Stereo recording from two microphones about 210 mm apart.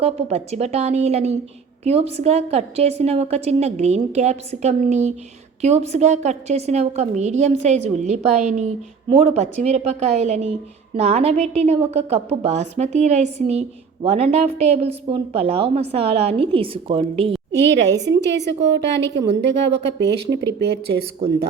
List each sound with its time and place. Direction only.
0.0 s a woman's voice: 30° right (ahead or behind)
17.5 s speech: 55° right (ahead or behind)